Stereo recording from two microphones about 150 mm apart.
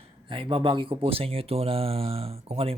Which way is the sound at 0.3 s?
35° right (ahead or behind).